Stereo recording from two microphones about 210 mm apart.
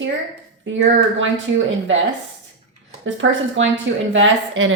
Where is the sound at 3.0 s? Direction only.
60° right (ahead or behind).